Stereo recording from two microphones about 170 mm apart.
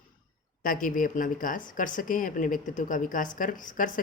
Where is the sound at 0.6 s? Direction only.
55° left (ahead or behind).